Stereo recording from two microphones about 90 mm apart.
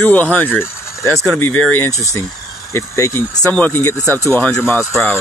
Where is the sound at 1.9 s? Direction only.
40° left (ahead or behind).